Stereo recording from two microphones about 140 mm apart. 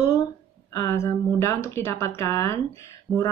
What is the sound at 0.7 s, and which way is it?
Speech, 20° left (ahead or behind).